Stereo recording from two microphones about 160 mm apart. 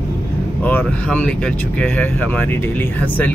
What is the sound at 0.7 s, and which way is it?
Speech, 10° left (ahead or behind).